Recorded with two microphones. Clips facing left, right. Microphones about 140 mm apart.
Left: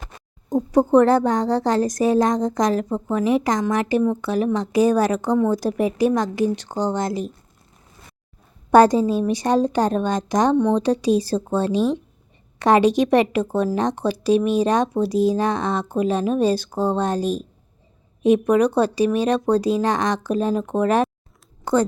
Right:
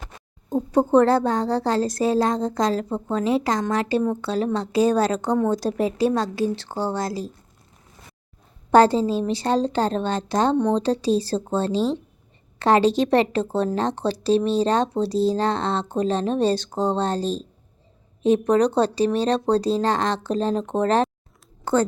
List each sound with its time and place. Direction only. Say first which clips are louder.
1.0 s speech: left 2 dB; 15° left (ahead or behind)
8.7 s a woman's voice: left 2 dB; 15° left (ahead or behind)